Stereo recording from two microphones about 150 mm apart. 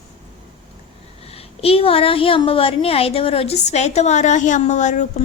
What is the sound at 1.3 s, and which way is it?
A woman's voice, 40° left (ahead or behind).